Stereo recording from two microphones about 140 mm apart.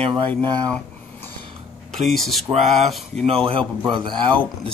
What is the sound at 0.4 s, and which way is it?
Speech, 30° right (ahead or behind).